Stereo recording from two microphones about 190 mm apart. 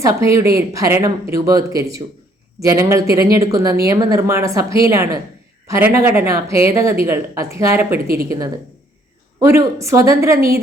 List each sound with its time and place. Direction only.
0.0 s speech: 15° right (ahead or behind)
8.0 s speech: 50° right (ahead or behind)
9.4 s speech: 15° right (ahead or behind)